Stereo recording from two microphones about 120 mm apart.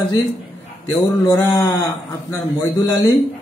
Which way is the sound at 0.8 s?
25° left (ahead or behind).